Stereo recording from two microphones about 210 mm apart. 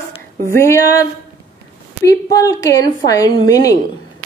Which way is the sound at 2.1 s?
15° left (ahead or behind).